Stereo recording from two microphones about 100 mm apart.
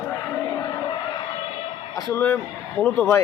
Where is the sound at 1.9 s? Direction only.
40° left (ahead or behind).